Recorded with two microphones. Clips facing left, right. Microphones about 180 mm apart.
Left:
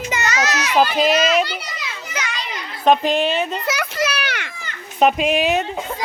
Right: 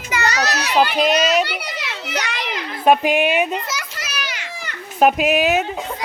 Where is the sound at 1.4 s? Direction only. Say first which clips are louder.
Right 1 dB; 65° right (ahead or behind).